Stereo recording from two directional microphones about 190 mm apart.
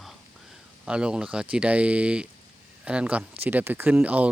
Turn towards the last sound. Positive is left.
turn(degrees=-5)  # may be behind; listen again after turning